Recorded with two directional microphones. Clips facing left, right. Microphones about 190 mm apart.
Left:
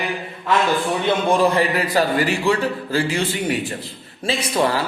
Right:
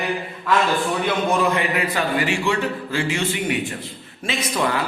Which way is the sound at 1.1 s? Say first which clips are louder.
Left 4 dB; 30° left (ahead or behind).